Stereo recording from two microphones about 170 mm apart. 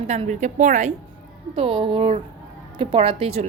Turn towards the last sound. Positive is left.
turn(degrees=-35)  # may be behind; listen again after turning